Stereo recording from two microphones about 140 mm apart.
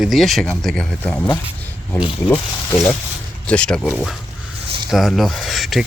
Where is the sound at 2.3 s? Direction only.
15° left (ahead or behind).